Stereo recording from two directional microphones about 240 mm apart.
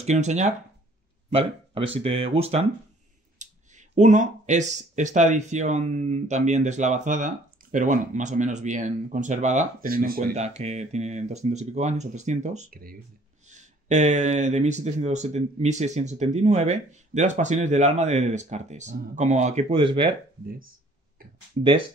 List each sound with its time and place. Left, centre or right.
0.0 s speech: right
20.4 s speech: right